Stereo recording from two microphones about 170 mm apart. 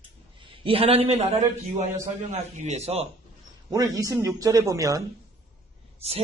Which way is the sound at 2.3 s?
45° right (ahead or behind).